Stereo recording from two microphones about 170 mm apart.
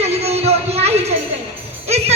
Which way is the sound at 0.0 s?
40° right (ahead or behind).